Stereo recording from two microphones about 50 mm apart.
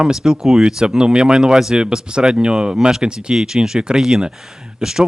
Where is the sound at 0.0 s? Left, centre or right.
Centre.